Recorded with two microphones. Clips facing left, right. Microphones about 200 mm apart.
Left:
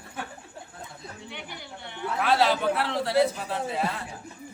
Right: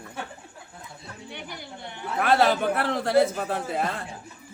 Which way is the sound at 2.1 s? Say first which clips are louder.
Right 2 dB; 50° right (ahead or behind).